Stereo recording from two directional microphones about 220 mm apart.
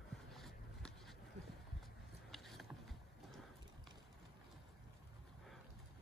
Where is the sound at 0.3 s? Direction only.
Centre (ahead or behind).